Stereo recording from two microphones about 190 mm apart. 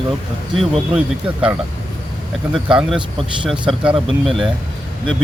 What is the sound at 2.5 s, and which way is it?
Speech, centre (ahead or behind).